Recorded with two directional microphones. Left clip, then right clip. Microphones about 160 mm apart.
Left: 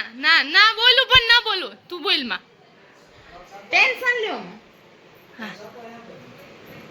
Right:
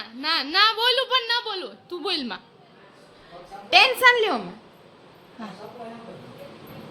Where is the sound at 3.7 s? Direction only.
40° right (ahead or behind).